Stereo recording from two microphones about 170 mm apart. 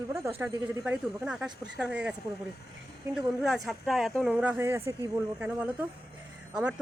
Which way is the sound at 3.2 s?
5° right (ahead or behind).